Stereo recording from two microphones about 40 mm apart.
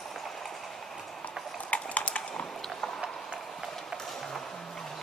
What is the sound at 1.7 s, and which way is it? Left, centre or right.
Clip-clop, left.